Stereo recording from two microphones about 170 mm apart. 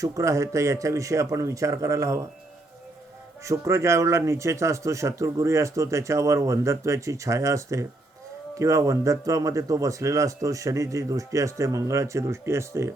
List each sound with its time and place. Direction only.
0.0 s speech: 20° right (ahead or behind)
3.4 s a man's voice: 20° right (ahead or behind)